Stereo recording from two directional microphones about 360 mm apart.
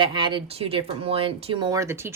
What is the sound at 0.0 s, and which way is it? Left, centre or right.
A woman's voice, centre.